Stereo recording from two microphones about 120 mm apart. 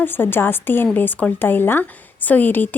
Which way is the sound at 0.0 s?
15° left (ahead or behind).